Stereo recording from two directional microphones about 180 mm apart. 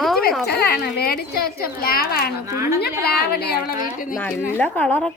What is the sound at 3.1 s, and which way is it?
A woman's voice, 60° left (ahead or behind).